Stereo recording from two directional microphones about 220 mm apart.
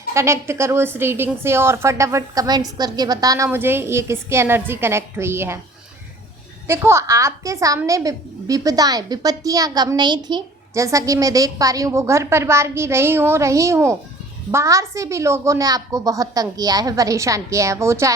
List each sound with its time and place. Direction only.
0.1 s a woman's voice: 10° right (ahead or behind)
6.7 s a woman's voice: 10° right (ahead or behind)